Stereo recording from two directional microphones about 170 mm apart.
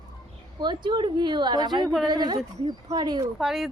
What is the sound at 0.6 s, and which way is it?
A woman's voice, 25° right (ahead or behind).